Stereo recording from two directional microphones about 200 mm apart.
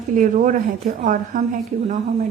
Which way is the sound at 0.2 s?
40° right (ahead or behind).